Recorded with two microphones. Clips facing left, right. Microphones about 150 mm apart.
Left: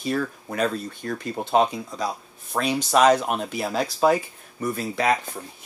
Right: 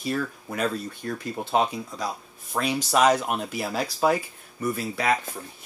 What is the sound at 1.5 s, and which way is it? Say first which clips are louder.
Speech: left 4 dB; centre (ahead or behind).